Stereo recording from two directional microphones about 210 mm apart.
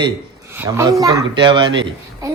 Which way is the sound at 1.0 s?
25° right (ahead or behind).